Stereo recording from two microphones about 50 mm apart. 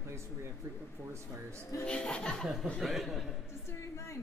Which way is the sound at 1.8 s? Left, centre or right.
Left.